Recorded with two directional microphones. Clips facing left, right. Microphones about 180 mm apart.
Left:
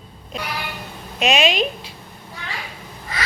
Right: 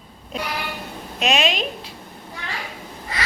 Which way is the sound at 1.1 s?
Centre (ahead or behind).